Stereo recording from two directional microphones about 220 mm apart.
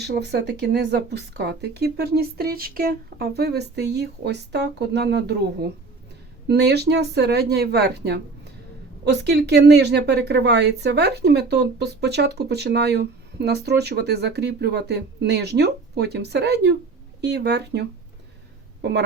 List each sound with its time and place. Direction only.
0.0 s a woman's voice: 50° right (ahead or behind)